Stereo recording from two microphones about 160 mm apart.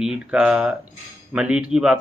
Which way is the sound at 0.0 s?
5° right (ahead or behind).